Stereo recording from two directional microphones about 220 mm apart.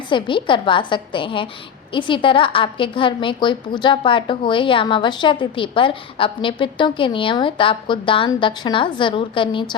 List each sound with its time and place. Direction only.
0.1 s a woman's voice: 20° left (ahead or behind)